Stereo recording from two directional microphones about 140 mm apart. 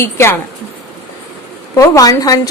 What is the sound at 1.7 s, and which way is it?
Speech, 25° left (ahead or behind).